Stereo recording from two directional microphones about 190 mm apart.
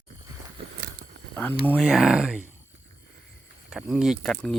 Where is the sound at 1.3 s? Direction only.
10° left (ahead or behind).